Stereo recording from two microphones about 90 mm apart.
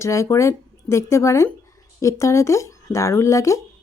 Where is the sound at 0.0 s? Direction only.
35° left (ahead or behind).